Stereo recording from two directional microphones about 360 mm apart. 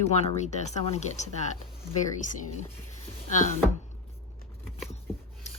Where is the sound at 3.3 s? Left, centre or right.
Centre.